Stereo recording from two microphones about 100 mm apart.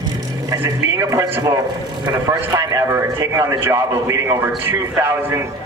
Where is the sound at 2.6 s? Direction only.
30° right (ahead or behind).